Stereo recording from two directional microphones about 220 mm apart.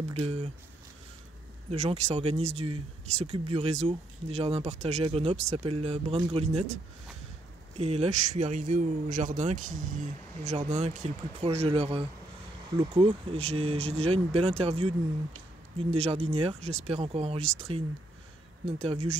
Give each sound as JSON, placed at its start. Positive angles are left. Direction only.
{"t": 0.1, "sound": "speech", "side_deg": -25}
{"t": 1.7, "sound": "speech", "side_deg": -30}
{"t": 18.9, "sound": "speech", "side_deg": -30}